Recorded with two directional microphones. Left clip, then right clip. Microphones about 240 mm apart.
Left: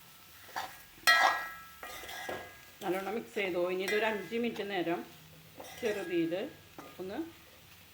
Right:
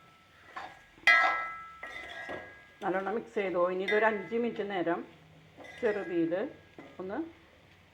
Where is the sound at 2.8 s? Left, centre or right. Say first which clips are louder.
Right 3 dB; centre.